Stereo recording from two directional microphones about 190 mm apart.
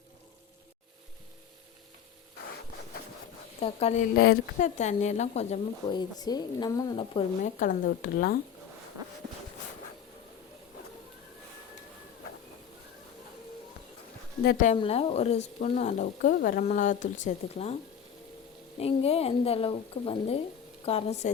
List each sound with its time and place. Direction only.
3.6 s speech: 30° left (ahead or behind)
4.2 s speech: 55° left (ahead or behind)
4.8 s speech: 35° left (ahead or behind)
6.0 s a woman's voice: 20° left (ahead or behind)
7.4 s speech: 45° left (ahead or behind)
14.4 s speech: 45° left (ahead or behind)
14.8 s speech: 30° left (ahead or behind)
18.8 s speech: 30° left (ahead or behind)